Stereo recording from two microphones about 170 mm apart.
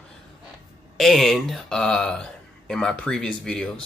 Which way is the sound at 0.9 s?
Centre (ahead or behind).